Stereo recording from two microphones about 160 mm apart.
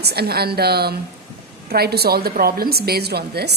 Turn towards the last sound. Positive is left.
turn(degrees=-90)